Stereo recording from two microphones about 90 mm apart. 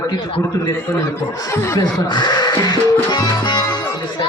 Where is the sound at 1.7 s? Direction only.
50° left (ahead or behind).